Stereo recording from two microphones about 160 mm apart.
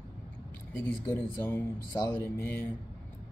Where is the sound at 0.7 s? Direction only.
10° left (ahead or behind).